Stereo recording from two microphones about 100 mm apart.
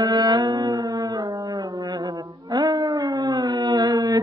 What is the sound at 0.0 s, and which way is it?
Carnatic music, 40° right (ahead or behind).